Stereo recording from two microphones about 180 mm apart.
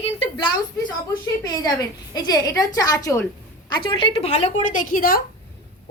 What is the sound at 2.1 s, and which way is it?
A woman's voice, 20° left (ahead or behind).